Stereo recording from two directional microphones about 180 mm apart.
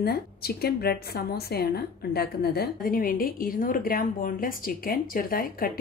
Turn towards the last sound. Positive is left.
turn(degrees=55)  # may be behind; listen again after turning